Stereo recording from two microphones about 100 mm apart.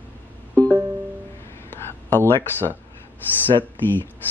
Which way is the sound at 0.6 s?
10° left (ahead or behind).